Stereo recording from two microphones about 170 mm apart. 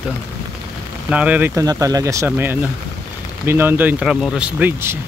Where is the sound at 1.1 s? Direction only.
10° right (ahead or behind).